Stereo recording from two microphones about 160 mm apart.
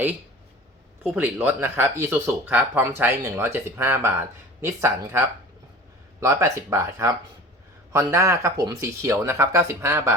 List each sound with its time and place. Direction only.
1.0 s speech: 5° right (ahead or behind)